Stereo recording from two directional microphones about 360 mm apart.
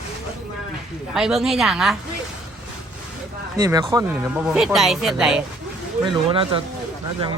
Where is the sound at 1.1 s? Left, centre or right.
Centre.